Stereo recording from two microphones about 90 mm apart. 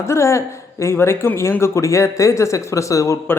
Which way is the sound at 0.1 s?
30° left (ahead or behind).